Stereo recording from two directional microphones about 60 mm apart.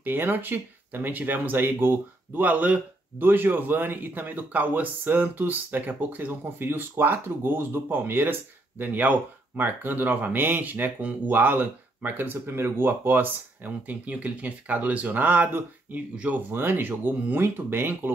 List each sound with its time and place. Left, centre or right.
0.0 s speech: right